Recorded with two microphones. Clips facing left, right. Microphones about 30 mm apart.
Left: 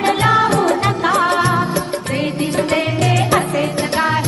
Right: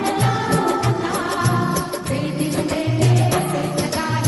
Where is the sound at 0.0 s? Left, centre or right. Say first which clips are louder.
Left 7 dB; left.